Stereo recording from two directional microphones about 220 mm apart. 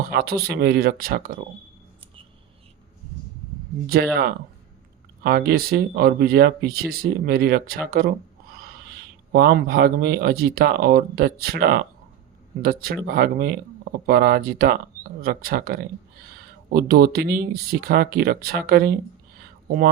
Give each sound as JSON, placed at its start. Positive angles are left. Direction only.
{"t": 0.1, "sound": "speech", "side_deg": -45}
{"t": 4.1, "sound": "speech", "side_deg": -45}
{"t": 9.3, "sound": "speech", "side_deg": -45}